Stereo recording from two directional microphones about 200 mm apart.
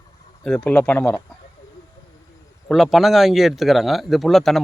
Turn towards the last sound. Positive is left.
turn(degrees=0)  # may be behind; listen again after turning